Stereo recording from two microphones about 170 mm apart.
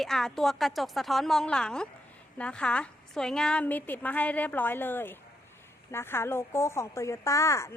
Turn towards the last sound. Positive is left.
turn(degrees=15)  # may be behind; listen again after turning